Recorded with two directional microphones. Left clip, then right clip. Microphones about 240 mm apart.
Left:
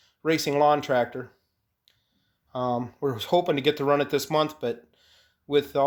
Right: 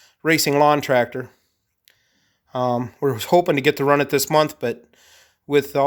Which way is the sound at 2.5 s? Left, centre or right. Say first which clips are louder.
Right 6 dB; right.